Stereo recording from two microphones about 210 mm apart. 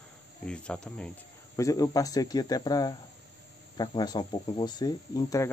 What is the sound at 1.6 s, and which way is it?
Speech, 15° left (ahead or behind).